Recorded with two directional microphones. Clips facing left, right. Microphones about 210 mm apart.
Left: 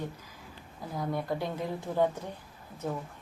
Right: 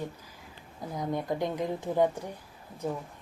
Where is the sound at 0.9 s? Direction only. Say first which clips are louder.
Right 1 dB; 20° right (ahead or behind).